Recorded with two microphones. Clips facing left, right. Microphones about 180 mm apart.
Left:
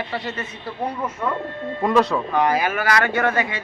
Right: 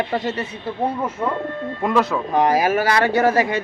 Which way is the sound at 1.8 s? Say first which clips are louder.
Left 1 dB; 5° right (ahead or behind).